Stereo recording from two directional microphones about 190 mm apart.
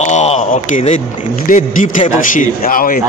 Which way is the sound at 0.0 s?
35° left (ahead or behind).